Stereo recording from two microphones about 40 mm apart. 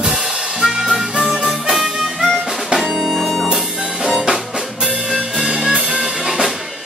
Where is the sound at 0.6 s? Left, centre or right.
Centre.